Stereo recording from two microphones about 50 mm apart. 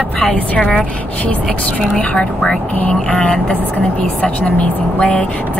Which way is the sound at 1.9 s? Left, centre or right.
Centre.